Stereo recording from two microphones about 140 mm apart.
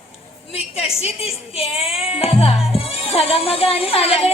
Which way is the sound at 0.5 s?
45° left (ahead or behind).